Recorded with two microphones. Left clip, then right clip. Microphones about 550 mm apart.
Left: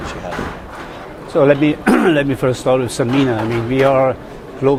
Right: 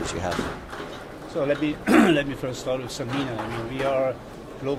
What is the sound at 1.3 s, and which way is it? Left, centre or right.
Speech, left.